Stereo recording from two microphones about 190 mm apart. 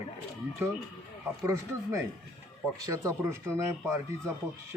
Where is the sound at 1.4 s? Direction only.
15° right (ahead or behind).